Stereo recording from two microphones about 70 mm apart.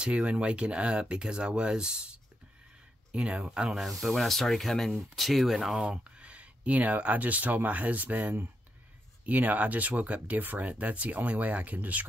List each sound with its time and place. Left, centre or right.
0.0 s speech: centre